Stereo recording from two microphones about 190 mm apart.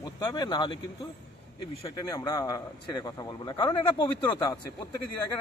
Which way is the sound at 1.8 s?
20° left (ahead or behind).